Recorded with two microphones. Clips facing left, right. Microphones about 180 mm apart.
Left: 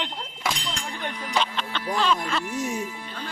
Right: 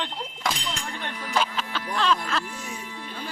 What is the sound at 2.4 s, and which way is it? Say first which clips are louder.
Music: left 9 dB; 45° left (ahead or behind).